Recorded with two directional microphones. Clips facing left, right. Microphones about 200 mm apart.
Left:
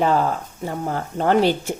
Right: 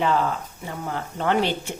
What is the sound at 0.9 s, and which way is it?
Speech, 40° left (ahead or behind).